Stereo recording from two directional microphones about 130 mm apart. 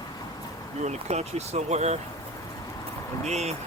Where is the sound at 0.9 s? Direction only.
55° right (ahead or behind).